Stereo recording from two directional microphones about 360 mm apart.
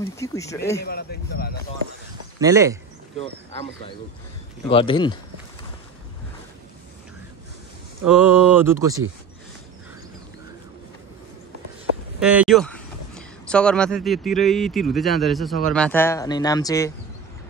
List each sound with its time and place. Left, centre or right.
0.0 s speech: centre
0.8 s a man's voice: left
2.4 s speech: centre
3.2 s speech: centre
8.1 s speech: centre
12.2 s speech: centre